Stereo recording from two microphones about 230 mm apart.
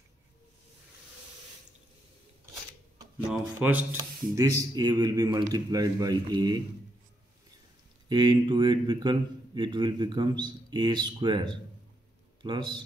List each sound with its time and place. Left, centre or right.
3.5 s speech: centre
8.1 s a man's voice: centre